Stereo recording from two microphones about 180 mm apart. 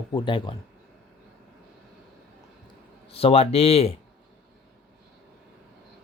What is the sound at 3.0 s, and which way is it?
Speech, 35° left (ahead or behind).